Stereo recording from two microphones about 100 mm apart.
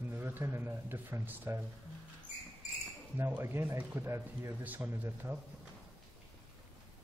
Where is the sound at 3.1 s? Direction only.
25° right (ahead or behind).